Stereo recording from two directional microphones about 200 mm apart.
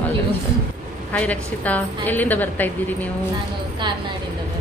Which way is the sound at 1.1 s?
5° left (ahead or behind).